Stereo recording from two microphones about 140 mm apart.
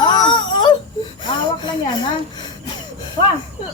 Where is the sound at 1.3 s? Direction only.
30° left (ahead or behind).